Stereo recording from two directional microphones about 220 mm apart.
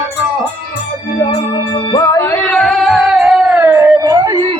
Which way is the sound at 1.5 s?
20° left (ahead or behind).